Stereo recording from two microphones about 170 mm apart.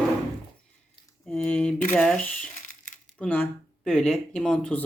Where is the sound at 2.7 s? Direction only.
50° left (ahead or behind).